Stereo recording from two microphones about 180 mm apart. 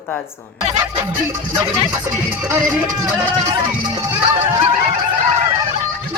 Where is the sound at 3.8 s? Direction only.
25° right (ahead or behind).